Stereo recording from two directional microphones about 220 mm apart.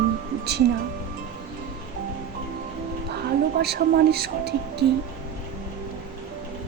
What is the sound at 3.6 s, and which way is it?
Speech, 45° right (ahead or behind).